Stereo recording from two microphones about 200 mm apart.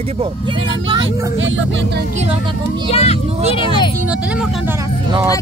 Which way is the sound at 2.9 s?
30° left (ahead or behind).